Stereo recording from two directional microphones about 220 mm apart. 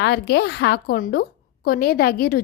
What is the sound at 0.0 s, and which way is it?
A woman's voice, 50° left (ahead or behind).